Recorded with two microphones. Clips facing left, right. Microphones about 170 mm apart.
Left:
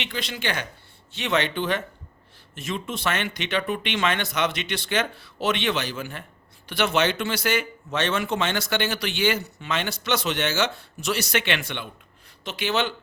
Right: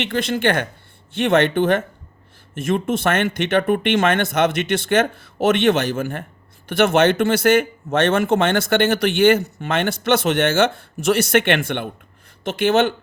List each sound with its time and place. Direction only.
0.0 s speech: 50° right (ahead or behind)